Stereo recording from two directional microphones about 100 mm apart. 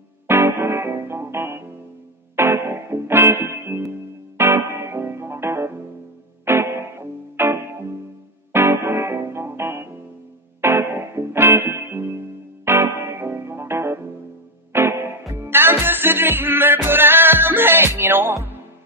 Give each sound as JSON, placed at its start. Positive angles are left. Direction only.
{"t": 0.3, "sound": "music", "side_deg": -25}